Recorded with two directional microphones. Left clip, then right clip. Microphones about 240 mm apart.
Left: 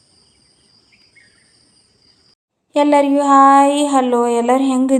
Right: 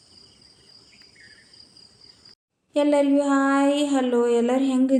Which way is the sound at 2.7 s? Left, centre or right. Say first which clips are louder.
Left 7 dB; left.